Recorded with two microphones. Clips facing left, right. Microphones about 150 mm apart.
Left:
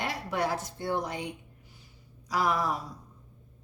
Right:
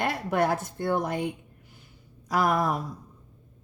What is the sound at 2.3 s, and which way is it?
Speech, 50° right (ahead or behind).